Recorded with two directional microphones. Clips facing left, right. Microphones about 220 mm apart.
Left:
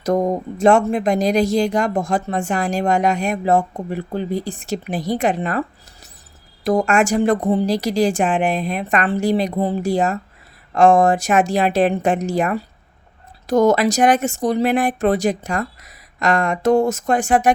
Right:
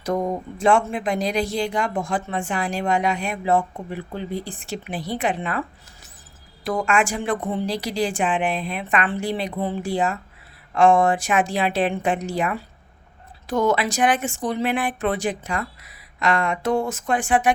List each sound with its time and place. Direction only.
0.0 s speech: 45° left (ahead or behind)